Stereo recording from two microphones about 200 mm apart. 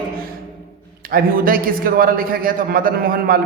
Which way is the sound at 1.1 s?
45° right (ahead or behind).